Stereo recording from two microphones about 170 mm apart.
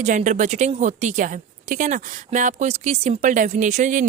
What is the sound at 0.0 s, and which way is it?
A woman's voice, 45° right (ahead or behind).